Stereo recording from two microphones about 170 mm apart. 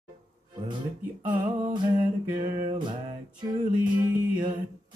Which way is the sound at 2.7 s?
25° right (ahead or behind).